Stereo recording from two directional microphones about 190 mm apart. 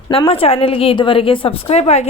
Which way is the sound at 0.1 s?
30° left (ahead or behind).